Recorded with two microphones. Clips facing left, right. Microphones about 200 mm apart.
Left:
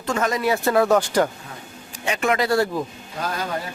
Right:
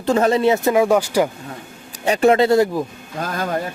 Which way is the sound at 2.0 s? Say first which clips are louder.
Right 7 dB; 35° right (ahead or behind).